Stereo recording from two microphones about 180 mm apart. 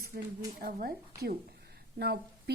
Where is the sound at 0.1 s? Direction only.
50° right (ahead or behind).